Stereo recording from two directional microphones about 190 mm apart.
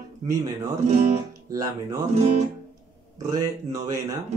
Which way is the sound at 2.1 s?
35° right (ahead or behind).